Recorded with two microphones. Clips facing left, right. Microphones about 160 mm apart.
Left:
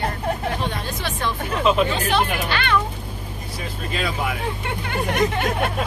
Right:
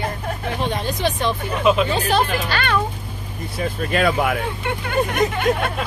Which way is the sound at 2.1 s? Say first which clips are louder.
Right 2 dB; 40° right (ahead or behind).